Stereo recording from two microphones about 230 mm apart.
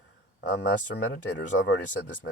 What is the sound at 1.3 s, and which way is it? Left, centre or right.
Speech, left.